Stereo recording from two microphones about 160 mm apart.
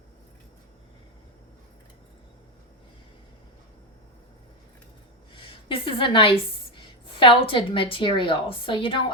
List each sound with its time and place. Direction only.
5.3 s a woman's voice: 30° left (ahead or behind)